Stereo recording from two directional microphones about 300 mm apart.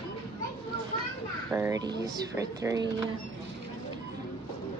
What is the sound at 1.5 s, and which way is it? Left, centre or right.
Speech, centre.